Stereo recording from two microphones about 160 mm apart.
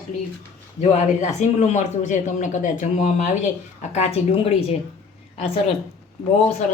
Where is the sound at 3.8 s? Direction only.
40° left (ahead or behind).